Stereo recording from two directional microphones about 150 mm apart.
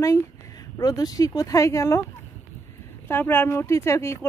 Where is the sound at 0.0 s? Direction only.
20° left (ahead or behind).